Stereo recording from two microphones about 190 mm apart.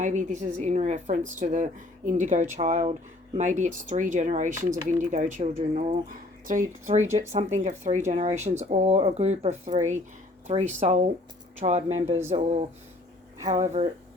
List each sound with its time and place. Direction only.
0.0 s speech: 40° right (ahead or behind)